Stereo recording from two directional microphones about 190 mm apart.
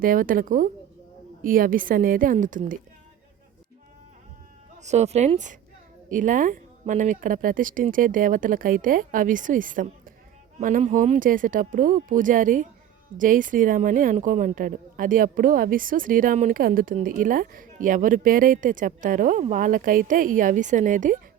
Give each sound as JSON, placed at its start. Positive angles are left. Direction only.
{"t": 0.0, "sound": "a woman's voice", "side_deg": -45}
{"t": 4.8, "sound": "a woman's voice", "side_deg": -35}